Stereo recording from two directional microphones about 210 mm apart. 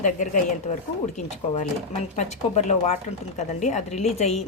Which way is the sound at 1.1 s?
35° left (ahead or behind).